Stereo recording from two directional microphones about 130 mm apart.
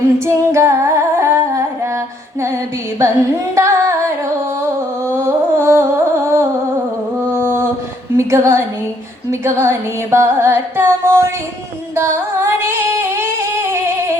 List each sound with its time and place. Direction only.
0.3 s humming: 20° right (ahead or behind)
3.5 s singing: 20° right (ahead or behind)
4.6 s music: 20° right (ahead or behind)
7.3 s a sound: 20° right (ahead or behind)
8.1 s a woman's voice: 20° right (ahead or behind)
9.3 s carnatic music: 20° right (ahead or behind)
11.9 s singing: 20° right (ahead or behind)